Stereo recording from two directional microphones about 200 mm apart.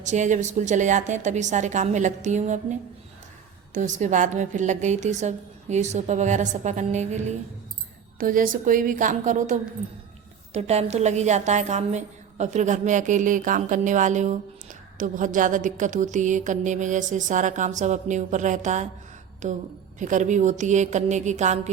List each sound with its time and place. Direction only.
0.0 s a woman's voice: 35° right (ahead or behind)
3.8 s a woman's voice: 35° right (ahead or behind)